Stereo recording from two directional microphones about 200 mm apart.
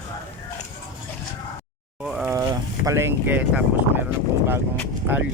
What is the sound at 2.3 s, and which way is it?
Speech, 15° right (ahead or behind).